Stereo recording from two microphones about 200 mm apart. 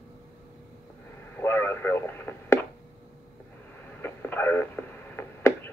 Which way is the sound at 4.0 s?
10° left (ahead or behind).